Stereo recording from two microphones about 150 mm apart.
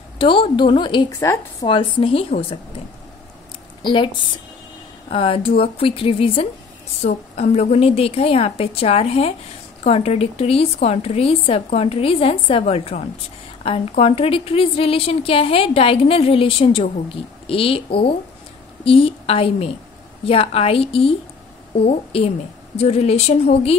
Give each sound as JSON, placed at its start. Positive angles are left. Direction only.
{"t": 0.2, "sound": "a woman's voice", "side_deg": 35}
{"t": 3.8, "sound": "a woman's voice", "side_deg": 35}
{"t": 5.1, "sound": "a woman's voice", "side_deg": 40}